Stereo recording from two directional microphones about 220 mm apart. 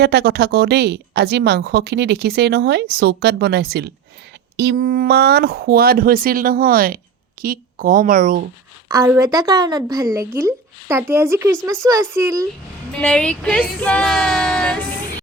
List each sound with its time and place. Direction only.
0.0 s a woman's voice: 45° right (ahead or behind)
8.9 s a woman's voice: 15° right (ahead or behind)
13.0 s speech: 5° left (ahead or behind)